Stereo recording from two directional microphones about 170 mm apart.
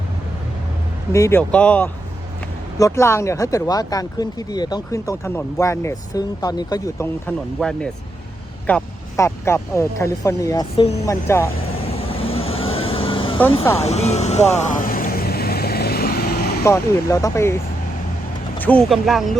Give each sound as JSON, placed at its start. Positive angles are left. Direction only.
{"t": 1.1, "sound": "speech", "side_deg": 15}
{"t": 7.6, "sound": "speech", "side_deg": 5}
{"t": 11.8, "sound": "vehicle", "side_deg": 35}
{"t": 16.6, "sound": "speech", "side_deg": 15}
{"t": 18.6, "sound": "speech", "side_deg": 10}